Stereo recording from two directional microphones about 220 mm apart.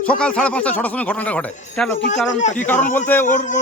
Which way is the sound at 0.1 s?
5° left (ahead or behind).